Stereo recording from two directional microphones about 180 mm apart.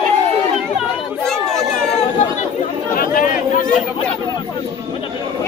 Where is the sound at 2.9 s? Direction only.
45° left (ahead or behind).